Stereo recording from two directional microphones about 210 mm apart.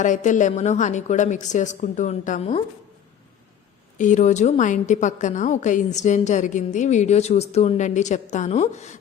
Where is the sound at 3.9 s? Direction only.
35° left (ahead or behind).